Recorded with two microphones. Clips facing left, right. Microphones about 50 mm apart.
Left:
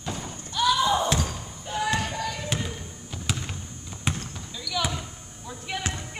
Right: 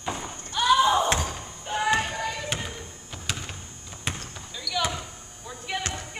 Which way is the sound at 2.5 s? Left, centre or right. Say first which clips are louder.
Left 1 dB; centre.